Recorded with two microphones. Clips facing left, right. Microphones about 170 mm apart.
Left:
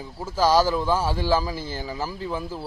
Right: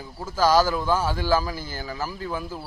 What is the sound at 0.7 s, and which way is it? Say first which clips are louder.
Speech: left 1 dB; centre (ahead or behind).